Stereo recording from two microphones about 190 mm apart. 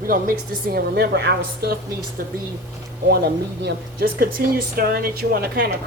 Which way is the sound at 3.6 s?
55° right (ahead or behind).